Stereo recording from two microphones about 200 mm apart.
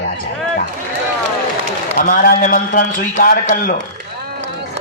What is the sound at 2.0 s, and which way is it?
A man's voice, 45° left (ahead or behind).